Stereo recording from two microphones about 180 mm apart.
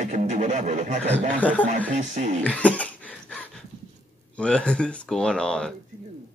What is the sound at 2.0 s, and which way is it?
Didgeridoo, 45° right (ahead or behind).